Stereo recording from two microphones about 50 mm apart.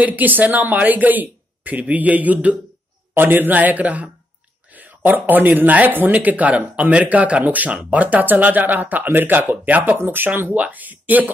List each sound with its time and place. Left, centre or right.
0.0 s speech: right
3.2 s speech: right
9.9 s speech: right
10.2 s speech: right
10.5 s speech: right